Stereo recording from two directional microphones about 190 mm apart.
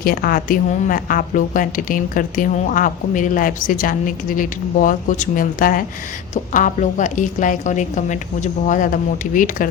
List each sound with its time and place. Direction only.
0.0 s a woman's voice: 50° left (ahead or behind)